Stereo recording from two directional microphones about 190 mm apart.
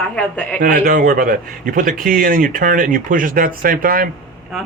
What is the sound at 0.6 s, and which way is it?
A man's voice, 45° right (ahead or behind).